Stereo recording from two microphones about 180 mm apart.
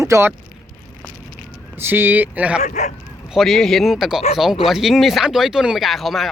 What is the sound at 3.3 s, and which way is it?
Speech, centre (ahead or behind).